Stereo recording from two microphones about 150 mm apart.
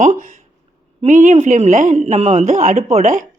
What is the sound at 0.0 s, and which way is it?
Speech, 55° right (ahead or behind).